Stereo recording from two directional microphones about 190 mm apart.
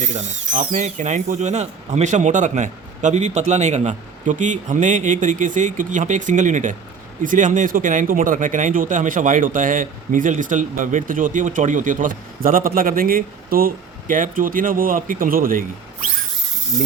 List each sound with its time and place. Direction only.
0.0 s speech: 40° right (ahead or behind)